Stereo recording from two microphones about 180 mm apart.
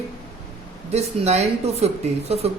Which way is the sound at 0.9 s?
35° right (ahead or behind).